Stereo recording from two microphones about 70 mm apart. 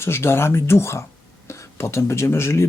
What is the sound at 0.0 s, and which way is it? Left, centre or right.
Speech, left.